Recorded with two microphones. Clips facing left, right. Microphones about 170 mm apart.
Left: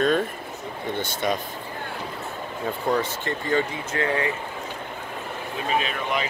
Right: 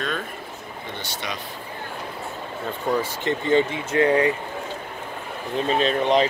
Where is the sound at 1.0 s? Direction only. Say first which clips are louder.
Left 7 dB; 50° left (ahead or behind).